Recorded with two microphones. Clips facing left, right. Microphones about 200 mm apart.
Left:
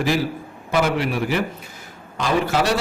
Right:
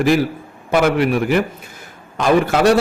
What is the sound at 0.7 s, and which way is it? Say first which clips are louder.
A man's voice: right 5 dB; 55° right (ahead or behind).